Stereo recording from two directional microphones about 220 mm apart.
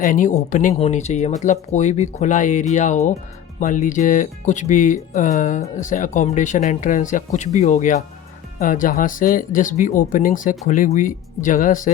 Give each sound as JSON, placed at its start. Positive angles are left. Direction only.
{"t": 0.0, "sound": "speech", "side_deg": 35}